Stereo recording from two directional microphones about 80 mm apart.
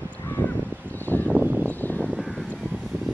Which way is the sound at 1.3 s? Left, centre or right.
Right.